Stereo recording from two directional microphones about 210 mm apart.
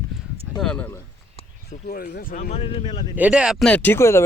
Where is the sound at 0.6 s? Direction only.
5° left (ahead or behind).